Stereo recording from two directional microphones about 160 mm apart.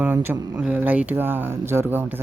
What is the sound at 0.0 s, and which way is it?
Speech, 10° right (ahead or behind).